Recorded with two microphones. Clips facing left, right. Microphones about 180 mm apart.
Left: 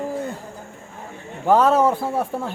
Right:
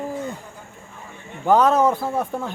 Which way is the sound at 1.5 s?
5° left (ahead or behind).